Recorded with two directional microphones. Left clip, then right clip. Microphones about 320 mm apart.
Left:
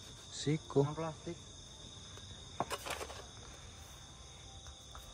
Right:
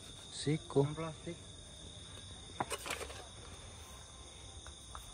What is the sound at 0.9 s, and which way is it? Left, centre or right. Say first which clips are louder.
Speech: left 2 dB; left.